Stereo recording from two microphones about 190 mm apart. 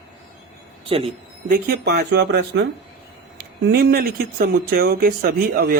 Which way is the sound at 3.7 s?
55° right (ahead or behind).